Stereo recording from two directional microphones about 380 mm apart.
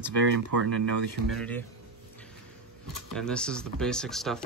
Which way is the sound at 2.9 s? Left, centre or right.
Centre.